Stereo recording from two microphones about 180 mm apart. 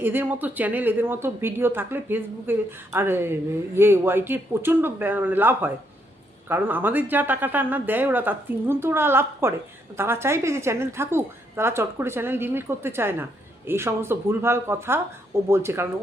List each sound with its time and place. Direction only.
0.0 s speech: 10° right (ahead or behind)